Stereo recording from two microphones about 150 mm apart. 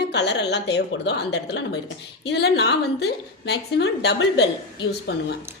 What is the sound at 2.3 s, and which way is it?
A woman's voice, 90° left.